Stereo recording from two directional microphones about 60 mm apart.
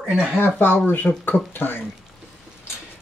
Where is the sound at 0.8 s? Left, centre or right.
Left.